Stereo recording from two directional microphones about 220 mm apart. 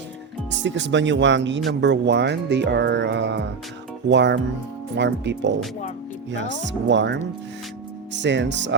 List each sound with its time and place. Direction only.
0.5 s speech: 55° right (ahead or behind)